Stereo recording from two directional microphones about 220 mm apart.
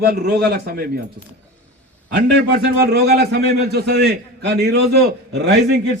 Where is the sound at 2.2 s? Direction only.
50° right (ahead or behind).